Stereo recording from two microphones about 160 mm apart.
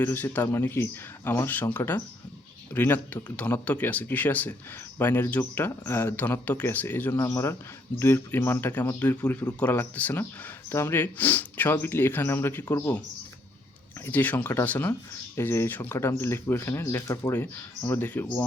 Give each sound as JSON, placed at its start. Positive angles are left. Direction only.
{"t": 0.0, "sound": "a man's voice", "side_deg": 10}
{"t": 14.0, "sound": "a man's voice", "side_deg": 10}